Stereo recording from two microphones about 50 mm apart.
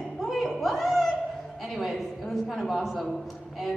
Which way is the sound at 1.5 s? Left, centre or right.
Centre.